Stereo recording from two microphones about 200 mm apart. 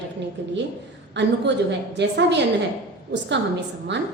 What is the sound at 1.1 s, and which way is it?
A woman's voice, 60° right (ahead or behind).